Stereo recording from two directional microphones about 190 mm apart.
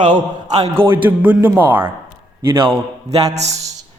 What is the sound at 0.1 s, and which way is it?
Speech, 20° right (ahead or behind).